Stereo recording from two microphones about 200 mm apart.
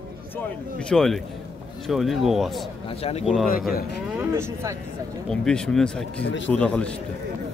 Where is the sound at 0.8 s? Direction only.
Centre (ahead or behind).